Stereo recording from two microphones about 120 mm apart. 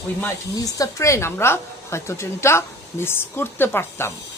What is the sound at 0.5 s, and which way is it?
A woman's voice, 30° left (ahead or behind).